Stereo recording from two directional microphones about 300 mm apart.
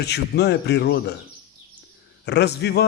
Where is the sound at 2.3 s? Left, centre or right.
Left.